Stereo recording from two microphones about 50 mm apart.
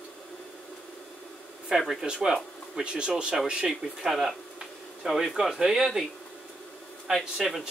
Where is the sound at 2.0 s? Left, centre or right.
Centre.